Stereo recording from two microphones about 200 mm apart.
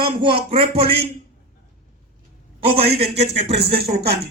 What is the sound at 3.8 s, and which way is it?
Speech, 50° right (ahead or behind).